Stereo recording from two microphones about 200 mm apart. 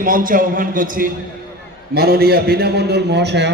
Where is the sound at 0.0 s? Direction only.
45° right (ahead or behind).